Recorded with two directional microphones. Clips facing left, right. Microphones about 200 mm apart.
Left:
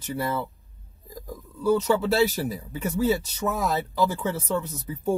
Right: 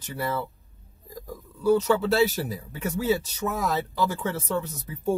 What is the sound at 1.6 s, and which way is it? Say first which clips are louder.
Speech: right 1 dB; centre (ahead or behind).